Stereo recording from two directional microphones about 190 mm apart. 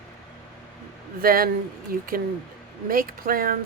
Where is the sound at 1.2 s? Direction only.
50° right (ahead or behind).